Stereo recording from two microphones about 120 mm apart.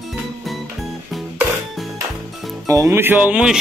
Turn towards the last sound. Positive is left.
turn(degrees=-10)  # may be behind; listen again after turning